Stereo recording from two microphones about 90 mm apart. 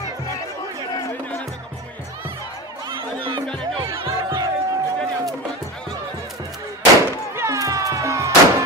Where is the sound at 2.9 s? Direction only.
75° right (ahead or behind).